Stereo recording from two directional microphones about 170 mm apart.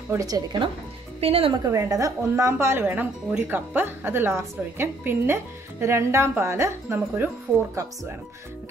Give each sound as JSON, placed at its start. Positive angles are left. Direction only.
{"t": 0.1, "sound": "a woman's voice", "side_deg": -20}
{"t": 1.2, "sound": "a woman's voice", "side_deg": -35}
{"t": 1.6, "sound": "a woman's voice", "side_deg": -20}